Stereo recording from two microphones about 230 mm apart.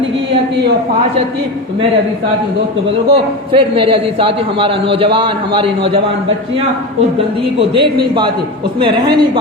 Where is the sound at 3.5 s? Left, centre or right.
Right.